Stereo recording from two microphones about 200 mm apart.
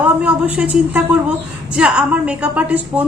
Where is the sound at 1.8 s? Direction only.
5° right (ahead or behind).